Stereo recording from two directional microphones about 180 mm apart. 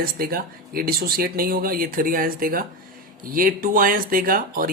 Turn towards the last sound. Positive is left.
turn(degrees=-50)  # may be behind; listen again after turning